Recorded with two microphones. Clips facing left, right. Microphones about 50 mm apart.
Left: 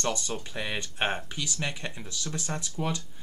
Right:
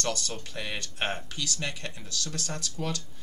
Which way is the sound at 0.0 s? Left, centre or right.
Centre.